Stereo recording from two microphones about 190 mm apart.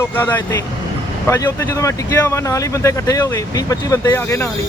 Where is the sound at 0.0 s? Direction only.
10° left (ahead or behind).